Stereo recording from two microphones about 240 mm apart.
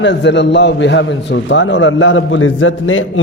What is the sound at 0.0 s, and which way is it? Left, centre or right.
A man's voice, left.